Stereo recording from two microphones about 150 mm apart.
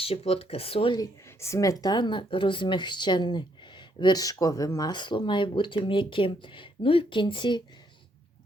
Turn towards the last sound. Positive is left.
turn(degrees=30)  # may be behind; listen again after turning